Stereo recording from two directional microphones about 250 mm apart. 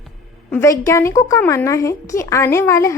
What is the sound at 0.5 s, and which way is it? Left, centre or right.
A woman's voice, centre.